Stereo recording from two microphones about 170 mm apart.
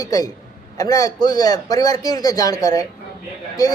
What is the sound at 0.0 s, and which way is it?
Speech, 20° left (ahead or behind).